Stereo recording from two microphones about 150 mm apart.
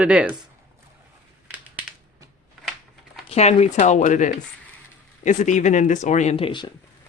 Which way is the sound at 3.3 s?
45° left (ahead or behind).